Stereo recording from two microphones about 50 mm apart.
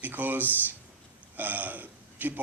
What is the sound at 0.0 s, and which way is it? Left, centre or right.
A man's voice, right.